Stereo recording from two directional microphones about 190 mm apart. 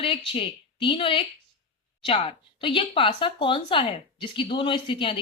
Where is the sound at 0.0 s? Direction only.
30° left (ahead or behind).